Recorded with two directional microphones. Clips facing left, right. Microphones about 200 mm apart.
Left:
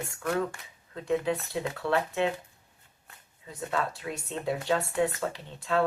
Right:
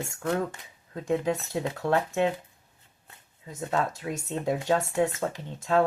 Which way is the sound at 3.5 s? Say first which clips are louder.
Right 3 dB; 45° right (ahead or behind).